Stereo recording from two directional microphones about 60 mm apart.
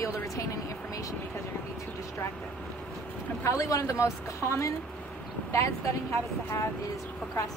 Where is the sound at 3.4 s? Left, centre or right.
Left.